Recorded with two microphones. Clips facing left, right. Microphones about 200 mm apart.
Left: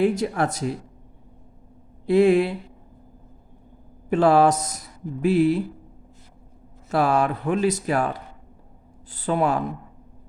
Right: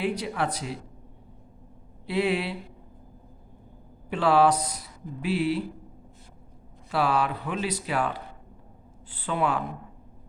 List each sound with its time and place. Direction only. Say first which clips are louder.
0.0 s speech: left 7 dB; 45° left (ahead or behind)
2.0 s speech: left 9 dB; 45° left (ahead or behind)
4.1 s speech: left 4 dB; 45° left (ahead or behind)
6.9 s speech: left 5 dB; 45° left (ahead or behind)